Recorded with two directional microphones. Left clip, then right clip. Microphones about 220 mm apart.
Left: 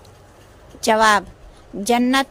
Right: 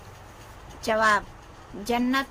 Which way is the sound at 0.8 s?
40° left (ahead or behind).